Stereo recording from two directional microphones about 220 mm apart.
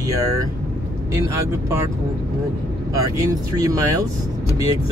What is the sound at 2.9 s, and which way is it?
Speech, 15° right (ahead or behind).